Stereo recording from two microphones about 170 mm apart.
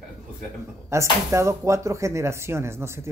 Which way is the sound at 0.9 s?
15° right (ahead or behind).